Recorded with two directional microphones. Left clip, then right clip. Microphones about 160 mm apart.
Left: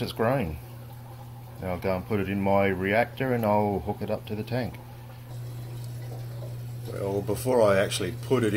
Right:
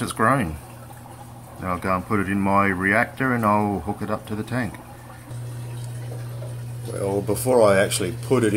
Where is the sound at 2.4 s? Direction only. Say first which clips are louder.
Right 4 dB; 10° left (ahead or behind).